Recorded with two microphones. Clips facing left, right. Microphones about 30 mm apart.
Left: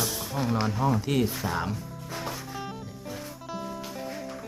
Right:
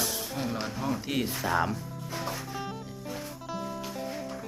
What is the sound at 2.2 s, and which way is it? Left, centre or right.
Music, centre.